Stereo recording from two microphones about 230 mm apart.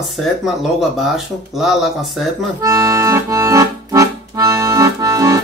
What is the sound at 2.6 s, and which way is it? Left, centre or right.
Accordion, centre.